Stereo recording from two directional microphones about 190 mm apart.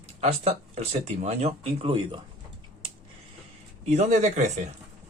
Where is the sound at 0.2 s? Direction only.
35° right (ahead or behind).